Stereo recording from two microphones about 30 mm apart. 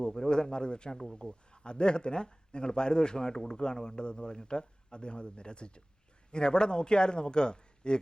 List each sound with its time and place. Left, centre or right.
0.1 s a man's voice: left